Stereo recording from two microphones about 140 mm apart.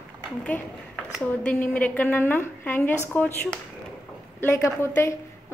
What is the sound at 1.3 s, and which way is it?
A woman's voice, 10° left (ahead or behind).